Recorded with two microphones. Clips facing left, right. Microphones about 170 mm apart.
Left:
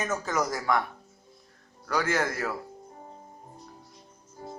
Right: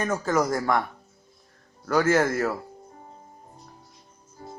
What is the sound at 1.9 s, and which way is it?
Speech, 45° right (ahead or behind).